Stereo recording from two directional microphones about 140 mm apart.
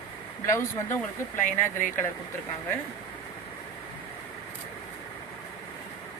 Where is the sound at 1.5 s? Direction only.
70° left (ahead or behind).